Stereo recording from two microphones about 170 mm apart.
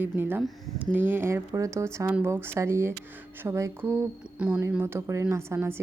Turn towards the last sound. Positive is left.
turn(degrees=-15)  # may be behind; listen again after turning